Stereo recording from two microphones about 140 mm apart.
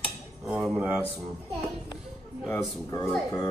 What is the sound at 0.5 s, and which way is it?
Speech, 5° right (ahead or behind).